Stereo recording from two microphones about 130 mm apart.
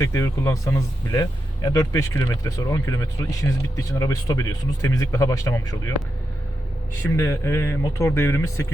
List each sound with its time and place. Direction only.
0.0 s a man's voice: 20° left (ahead or behind)
7.2 s a man's voice: 20° left (ahead or behind)